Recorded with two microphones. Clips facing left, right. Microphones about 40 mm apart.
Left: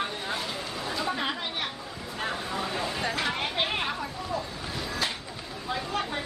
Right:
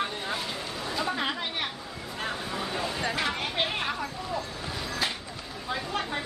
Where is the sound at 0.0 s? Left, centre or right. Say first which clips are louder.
Even; centre.